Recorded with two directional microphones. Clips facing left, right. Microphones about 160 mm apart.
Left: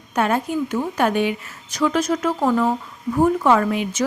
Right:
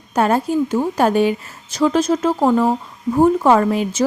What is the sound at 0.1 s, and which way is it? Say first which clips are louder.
A woman's voice: right 4 dB; 35° right (ahead or behind).